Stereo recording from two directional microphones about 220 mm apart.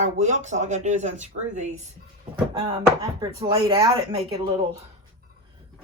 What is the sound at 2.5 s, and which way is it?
Speech, 20° right (ahead or behind).